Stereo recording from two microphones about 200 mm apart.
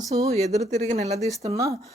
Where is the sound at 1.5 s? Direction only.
15° right (ahead or behind).